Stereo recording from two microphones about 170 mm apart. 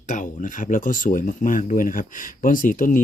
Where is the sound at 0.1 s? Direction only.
50° left (ahead or behind).